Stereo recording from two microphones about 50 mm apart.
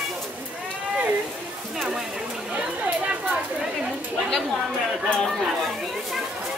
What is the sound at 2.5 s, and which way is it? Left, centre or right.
Speech, right.